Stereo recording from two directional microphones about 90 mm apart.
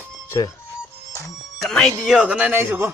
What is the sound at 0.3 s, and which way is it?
Speech, 35° left (ahead or behind).